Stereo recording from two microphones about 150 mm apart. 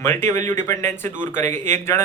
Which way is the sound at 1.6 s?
50° right (ahead or behind).